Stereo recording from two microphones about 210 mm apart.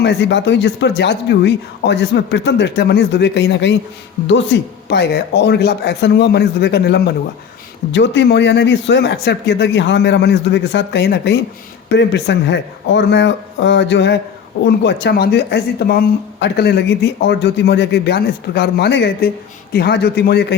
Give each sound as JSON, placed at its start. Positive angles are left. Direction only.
{"t": 0.0, "sound": "speech", "side_deg": 55}